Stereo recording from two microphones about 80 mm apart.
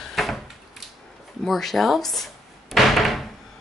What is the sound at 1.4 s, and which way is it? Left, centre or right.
Door, centre.